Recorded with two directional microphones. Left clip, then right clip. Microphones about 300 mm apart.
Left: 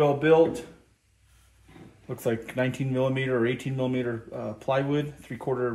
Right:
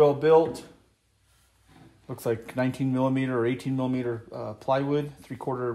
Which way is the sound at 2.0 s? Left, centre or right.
Right.